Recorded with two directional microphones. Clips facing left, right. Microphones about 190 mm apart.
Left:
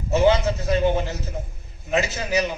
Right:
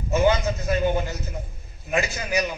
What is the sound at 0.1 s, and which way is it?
A man's voice, 25° left (ahead or behind).